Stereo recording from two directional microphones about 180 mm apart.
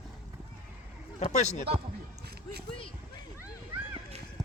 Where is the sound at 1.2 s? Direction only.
40° left (ahead or behind).